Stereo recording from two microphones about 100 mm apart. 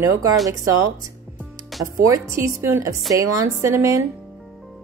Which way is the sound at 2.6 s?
20° right (ahead or behind).